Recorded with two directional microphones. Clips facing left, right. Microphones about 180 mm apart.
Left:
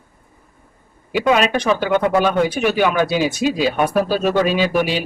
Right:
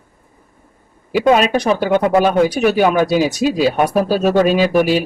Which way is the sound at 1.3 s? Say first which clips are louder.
Right 2 dB; 40° right (ahead or behind).